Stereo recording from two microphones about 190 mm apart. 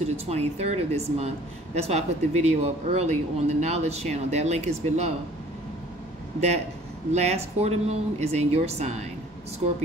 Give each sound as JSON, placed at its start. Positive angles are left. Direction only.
{"t": 0.0, "sound": "speech", "side_deg": -35}
{"t": 7.1, "sound": "speech", "side_deg": -35}